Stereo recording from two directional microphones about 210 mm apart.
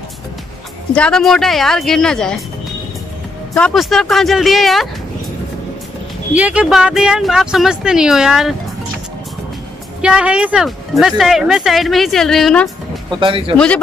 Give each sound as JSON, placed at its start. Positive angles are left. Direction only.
{"t": 0.9, "sound": "speech", "side_deg": 5}
{"t": 3.5, "sound": "speech", "side_deg": 0}
{"t": 6.3, "sound": "speech", "side_deg": -5}
{"t": 10.0, "sound": "speech", "side_deg": -5}
{"t": 13.1, "sound": "speech", "side_deg": -25}